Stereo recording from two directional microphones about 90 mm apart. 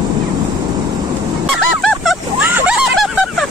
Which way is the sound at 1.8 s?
Centre (ahead or behind).